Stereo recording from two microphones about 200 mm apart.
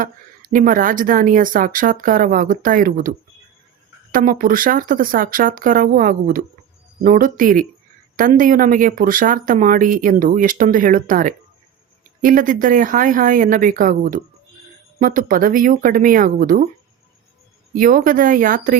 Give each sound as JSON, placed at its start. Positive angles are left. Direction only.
{"t": 0.0, "sound": "speech", "side_deg": -45}
{"t": 17.7, "sound": "speech", "side_deg": -45}